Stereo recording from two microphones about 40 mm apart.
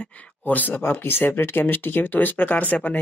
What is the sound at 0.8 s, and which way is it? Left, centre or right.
Speech, left.